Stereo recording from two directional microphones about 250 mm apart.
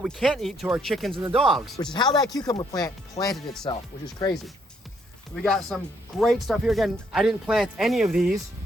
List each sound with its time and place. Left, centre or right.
0.0 s speech: centre
1.9 s speech: centre
3.3 s speech: centre
5.3 s speech: centre